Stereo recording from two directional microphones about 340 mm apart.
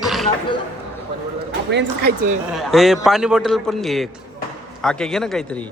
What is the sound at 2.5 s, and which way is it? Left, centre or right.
Speech, centre.